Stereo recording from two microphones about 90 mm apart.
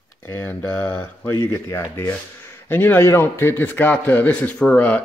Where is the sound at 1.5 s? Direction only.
35° left (ahead or behind); by 5.0 s 15° left (ahead or behind).